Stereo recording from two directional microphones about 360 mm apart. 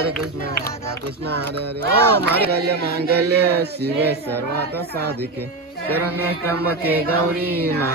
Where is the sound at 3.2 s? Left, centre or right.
Right.